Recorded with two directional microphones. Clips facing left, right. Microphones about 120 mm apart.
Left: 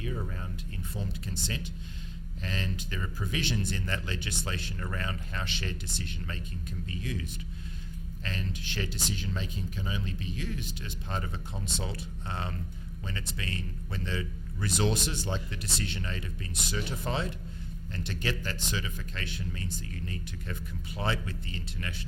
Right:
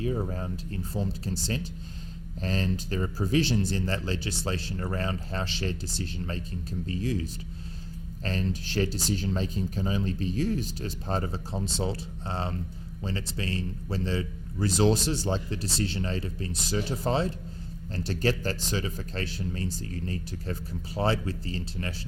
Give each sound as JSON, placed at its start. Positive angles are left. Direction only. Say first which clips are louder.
{"t": 0.0, "sound": "speech", "louder": "right 7 dB", "side_deg": -35}